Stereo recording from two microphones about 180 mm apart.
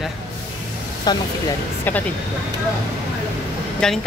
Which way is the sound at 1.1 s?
20° left (ahead or behind).